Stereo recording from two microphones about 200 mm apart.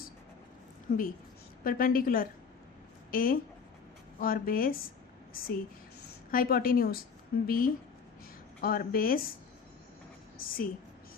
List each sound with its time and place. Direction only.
0.9 s a woman's voice: 40° left (ahead or behind)
6.3 s a woman's voice: 45° left (ahead or behind)
10.3 s a woman's voice: 45° left (ahead or behind)